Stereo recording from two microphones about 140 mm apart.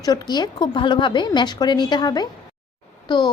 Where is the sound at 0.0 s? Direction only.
25° left (ahead or behind).